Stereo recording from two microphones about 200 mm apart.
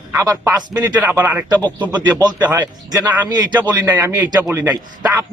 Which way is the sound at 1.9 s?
20° right (ahead or behind).